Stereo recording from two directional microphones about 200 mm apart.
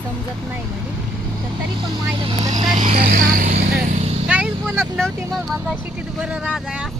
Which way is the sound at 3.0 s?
45° right (ahead or behind).